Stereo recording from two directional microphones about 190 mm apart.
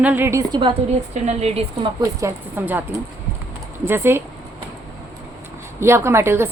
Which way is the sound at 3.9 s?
10° right (ahead or behind).